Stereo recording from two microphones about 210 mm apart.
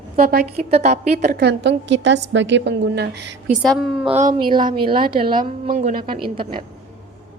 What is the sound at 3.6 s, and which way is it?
Speech, centre (ahead or behind).